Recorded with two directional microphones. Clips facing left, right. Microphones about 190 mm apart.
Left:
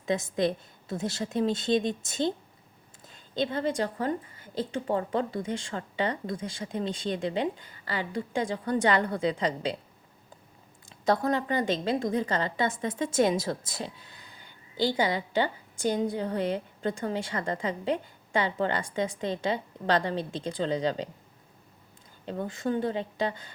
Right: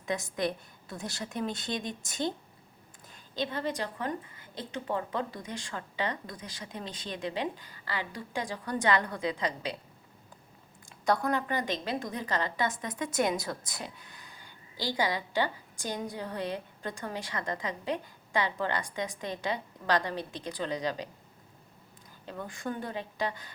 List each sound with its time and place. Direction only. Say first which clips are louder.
0.0 s a woman's voice: left 5 dB; 25° left (ahead or behind)
3.3 s a woman's voice: left 5 dB; 30° left (ahead or behind)
10.8 s a woman's voice: left 3 dB; 25° left (ahead or behind)
22.3 s a woman's voice: left 7 dB; 25° left (ahead or behind)